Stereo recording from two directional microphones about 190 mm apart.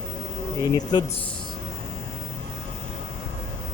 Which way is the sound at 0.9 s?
25° left (ahead or behind).